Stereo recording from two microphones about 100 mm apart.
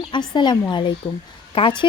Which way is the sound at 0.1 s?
50° left (ahead or behind).